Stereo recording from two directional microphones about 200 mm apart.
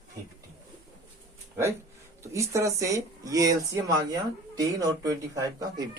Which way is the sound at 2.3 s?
15° right (ahead or behind).